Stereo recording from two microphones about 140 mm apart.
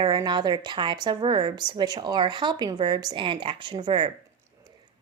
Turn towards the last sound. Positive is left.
turn(degrees=-35)  # may be behind; listen again after turning